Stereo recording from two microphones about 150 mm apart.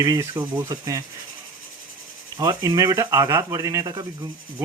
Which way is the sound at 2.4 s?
25° right (ahead or behind).